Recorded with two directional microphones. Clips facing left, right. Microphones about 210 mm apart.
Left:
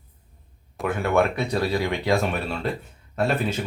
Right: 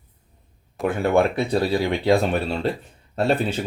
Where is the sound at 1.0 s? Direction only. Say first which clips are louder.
Right 2 dB; 30° right (ahead or behind).